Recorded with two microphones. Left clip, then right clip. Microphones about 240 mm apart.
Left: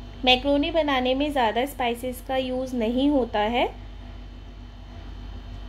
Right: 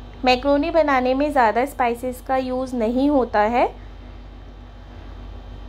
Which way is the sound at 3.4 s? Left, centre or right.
Right.